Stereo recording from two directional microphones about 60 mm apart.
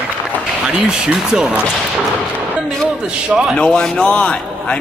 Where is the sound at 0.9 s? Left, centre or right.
Centre.